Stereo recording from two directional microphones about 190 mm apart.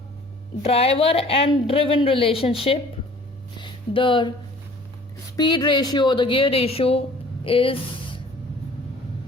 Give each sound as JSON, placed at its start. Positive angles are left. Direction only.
{"t": 0.6, "sound": "a woman's voice", "side_deg": 30}
{"t": 3.6, "sound": "music", "side_deg": 25}
{"t": 5.4, "sound": "a woman's voice", "side_deg": 25}